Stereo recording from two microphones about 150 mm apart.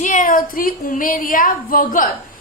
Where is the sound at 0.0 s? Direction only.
60° left (ahead or behind).